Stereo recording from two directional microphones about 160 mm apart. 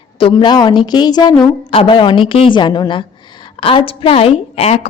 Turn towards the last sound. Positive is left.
turn(degrees=40)  # may be behind; listen again after turning